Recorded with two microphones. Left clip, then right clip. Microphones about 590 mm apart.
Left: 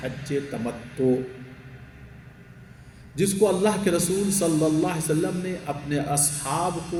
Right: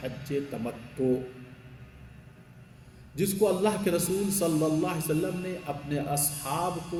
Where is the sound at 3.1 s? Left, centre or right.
Right.